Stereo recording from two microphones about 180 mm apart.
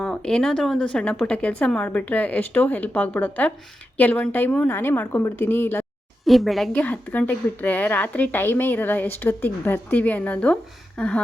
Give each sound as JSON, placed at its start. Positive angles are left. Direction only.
{"t": 0.0, "sound": "speech", "side_deg": 5}
{"t": 6.2, "sound": "speech", "side_deg": 0}